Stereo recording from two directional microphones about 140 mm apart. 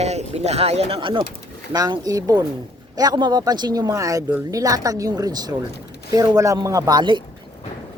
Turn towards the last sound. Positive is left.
turn(degrees=-30)  # may be behind; listen again after turning